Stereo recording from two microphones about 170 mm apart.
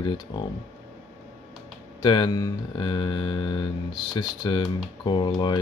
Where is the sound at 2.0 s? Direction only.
25° left (ahead or behind).